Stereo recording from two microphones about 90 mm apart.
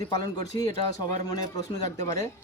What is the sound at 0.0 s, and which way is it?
Speech, 50° left (ahead or behind).